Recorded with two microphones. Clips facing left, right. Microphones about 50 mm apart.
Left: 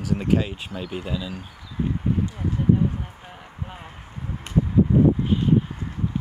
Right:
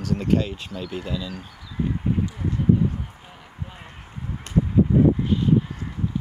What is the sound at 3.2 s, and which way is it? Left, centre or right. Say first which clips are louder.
Basketball bounce: left 2 dB; centre.